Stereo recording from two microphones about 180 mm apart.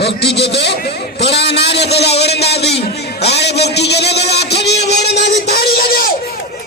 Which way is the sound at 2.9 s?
65° left (ahead or behind).